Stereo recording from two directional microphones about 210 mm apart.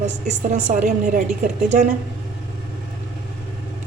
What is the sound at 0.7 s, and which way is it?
Speech, 35° right (ahead or behind).